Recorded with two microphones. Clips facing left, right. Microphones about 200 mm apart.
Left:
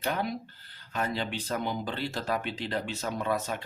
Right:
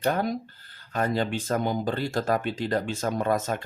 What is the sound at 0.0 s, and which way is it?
Speech, 45° right (ahead or behind).